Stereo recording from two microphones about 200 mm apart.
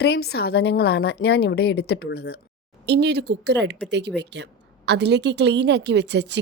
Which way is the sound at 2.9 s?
55° right (ahead or behind).